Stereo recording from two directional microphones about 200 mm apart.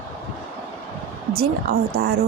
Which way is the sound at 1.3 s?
50° right (ahead or behind).